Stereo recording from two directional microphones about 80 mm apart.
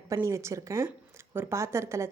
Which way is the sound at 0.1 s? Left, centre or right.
Right.